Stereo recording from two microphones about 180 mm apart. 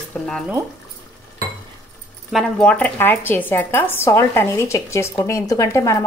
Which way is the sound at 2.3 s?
5° left (ahead or behind).